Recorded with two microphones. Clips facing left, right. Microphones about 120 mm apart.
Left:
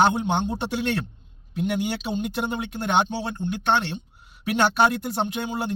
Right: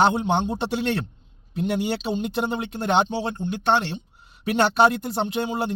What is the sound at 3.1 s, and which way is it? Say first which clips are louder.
Speech: right 2 dB; 25° right (ahead or behind).